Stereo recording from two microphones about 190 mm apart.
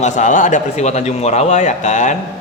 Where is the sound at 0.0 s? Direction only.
40° left (ahead or behind).